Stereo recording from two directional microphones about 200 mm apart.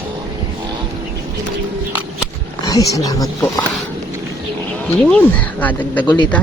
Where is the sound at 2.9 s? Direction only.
15° left (ahead or behind).